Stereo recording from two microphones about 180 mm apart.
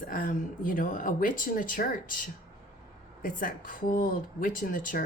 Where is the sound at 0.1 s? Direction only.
50° left (ahead or behind).